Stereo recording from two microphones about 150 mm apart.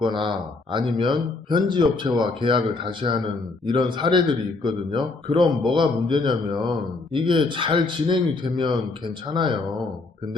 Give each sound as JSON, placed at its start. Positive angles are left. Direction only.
{"t": 0.0, "sound": "speech", "side_deg": -30}